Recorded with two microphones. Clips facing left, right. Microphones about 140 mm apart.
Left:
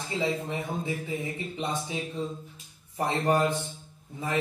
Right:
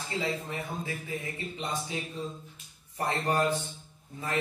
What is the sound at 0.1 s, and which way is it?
Speech, 20° left (ahead or behind).